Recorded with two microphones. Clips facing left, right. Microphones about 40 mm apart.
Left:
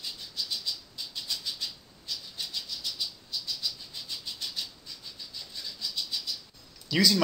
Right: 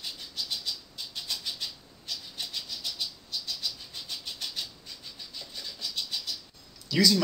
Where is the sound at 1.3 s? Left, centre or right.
Right.